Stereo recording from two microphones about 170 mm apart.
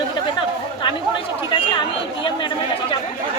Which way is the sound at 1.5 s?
30° left (ahead or behind).